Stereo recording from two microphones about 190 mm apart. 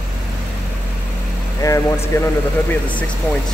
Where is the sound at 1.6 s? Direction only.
15° left (ahead or behind).